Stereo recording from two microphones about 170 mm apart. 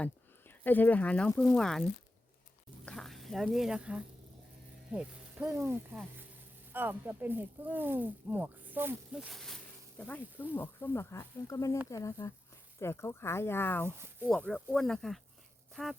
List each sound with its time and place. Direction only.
0.0 s speech: 10° left (ahead or behind)
2.8 s a sound: centre (ahead or behind)
5.5 s speech: 15° right (ahead or behind); by 13.8 s 10° left (ahead or behind)
13.8 s speech: 15° right (ahead or behind)
14.3 s speech: 5° left (ahead or behind)